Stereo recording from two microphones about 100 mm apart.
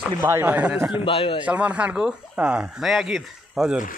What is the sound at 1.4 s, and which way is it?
Speech, 15° right (ahead or behind).